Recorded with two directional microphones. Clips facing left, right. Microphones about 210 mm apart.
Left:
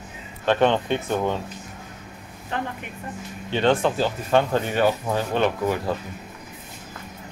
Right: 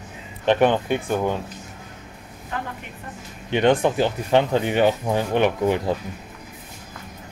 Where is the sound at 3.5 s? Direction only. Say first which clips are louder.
Right 2 dB; 15° right (ahead or behind).